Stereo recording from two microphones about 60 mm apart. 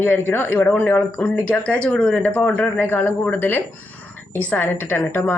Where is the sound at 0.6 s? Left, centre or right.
Left.